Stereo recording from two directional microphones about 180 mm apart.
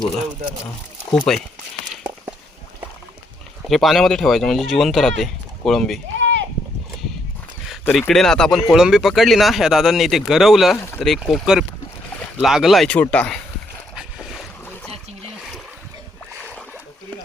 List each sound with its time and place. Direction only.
1.1 s speech: 5° left (ahead or behind)
3.7 s speech: centre (ahead or behind)
6.1 s a sound: 90° right
7.9 s speech: 5° left (ahead or behind)
13.9 s boat: centre (ahead or behind)